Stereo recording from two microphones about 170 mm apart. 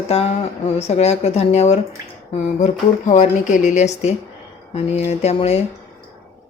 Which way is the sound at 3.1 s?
45° left (ahead or behind).